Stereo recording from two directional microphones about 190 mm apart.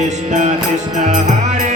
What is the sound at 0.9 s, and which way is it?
Music, 40° right (ahead or behind).